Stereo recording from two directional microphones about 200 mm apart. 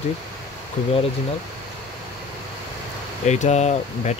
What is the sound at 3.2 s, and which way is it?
Speech, 35° left (ahead or behind).